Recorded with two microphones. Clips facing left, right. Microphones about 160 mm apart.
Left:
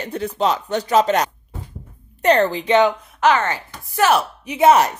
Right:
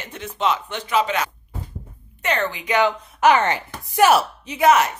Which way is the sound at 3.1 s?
15° right (ahead or behind).